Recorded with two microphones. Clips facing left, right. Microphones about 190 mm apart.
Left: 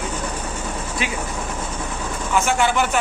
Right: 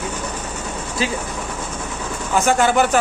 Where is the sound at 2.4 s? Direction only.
40° right (ahead or behind).